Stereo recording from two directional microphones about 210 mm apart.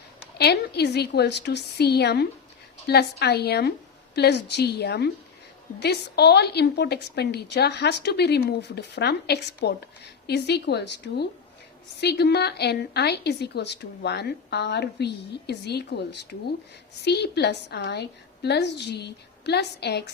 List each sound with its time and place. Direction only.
0.3 s a woman's voice: 50° left (ahead or behind)